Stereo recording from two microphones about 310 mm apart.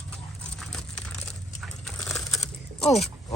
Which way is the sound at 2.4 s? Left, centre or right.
Left.